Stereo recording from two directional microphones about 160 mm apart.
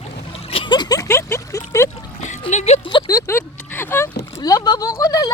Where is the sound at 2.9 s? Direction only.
25° left (ahead or behind).